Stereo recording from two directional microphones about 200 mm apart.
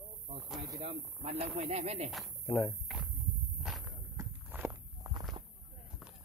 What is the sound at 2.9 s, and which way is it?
Walk, centre (ahead or behind).